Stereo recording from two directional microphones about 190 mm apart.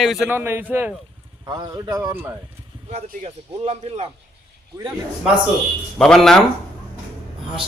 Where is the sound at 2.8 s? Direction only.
35° right (ahead or behind).